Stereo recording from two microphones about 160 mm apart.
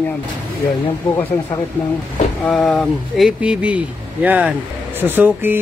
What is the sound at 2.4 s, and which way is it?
Speech, 5° left (ahead or behind).